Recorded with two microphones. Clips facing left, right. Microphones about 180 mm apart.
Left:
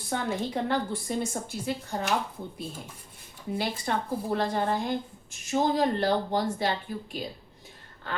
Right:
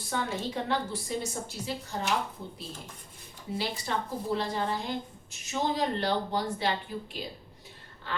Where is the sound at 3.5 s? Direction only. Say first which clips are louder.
Left 3 dB; 55° left (ahead or behind).